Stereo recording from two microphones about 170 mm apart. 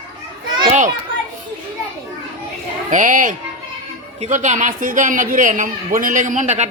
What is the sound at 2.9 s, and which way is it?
A man's voice, 50° right (ahead or behind).